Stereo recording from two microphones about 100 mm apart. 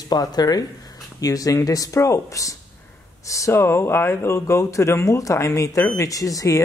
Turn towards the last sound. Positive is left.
turn(degrees=35)  # may be behind; listen again after turning